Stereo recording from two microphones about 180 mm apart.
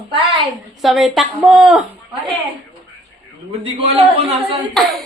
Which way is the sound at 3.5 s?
35° right (ahead or behind).